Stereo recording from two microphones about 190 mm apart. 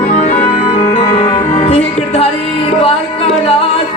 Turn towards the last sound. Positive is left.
turn(degrees=30)  # may be behind; listen again after turning